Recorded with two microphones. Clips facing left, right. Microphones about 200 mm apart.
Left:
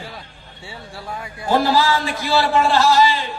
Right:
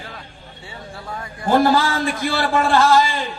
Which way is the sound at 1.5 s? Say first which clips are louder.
Right 1 dB; 50° right (ahead or behind).